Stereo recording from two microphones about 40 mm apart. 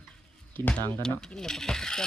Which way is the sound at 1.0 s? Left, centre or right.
Centre.